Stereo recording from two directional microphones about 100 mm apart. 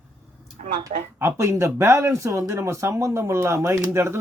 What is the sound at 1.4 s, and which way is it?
Speech, 30° right (ahead or behind).